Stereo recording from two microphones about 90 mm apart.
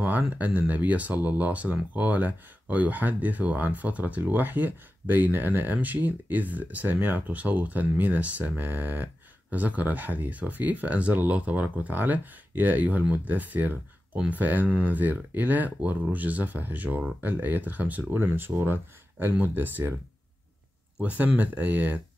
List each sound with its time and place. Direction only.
0.2 s speech: 15° right (ahead or behind)
21.0 s speech: 15° right (ahead or behind)